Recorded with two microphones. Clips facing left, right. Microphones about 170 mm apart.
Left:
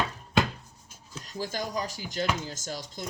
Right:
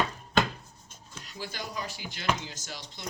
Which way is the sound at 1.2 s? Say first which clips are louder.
Left 6 dB; 45° left (ahead or behind).